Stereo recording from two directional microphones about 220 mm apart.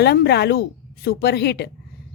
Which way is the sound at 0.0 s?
50° left (ahead or behind).